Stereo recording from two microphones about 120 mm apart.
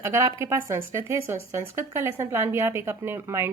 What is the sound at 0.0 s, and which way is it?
Speech, 25° right (ahead or behind).